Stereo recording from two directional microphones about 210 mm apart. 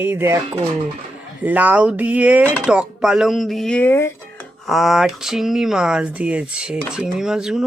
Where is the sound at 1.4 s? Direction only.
10° right (ahead or behind); by 4.5 s 10° left (ahead or behind).